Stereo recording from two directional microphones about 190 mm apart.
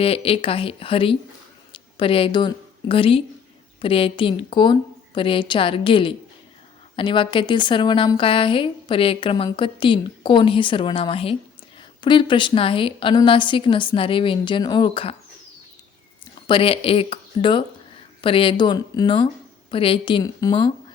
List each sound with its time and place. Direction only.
0.0 s a woman's voice: 30° left (ahead or behind)
16.5 s a woman's voice: 30° left (ahead or behind)